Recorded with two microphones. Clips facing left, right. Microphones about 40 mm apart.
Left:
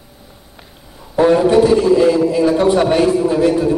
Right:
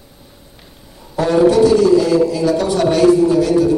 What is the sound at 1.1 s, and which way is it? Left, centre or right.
A man's voice, left.